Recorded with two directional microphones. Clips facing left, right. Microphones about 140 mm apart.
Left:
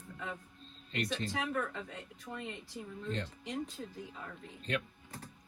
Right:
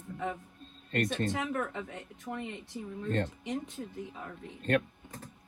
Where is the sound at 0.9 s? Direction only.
50° right (ahead or behind).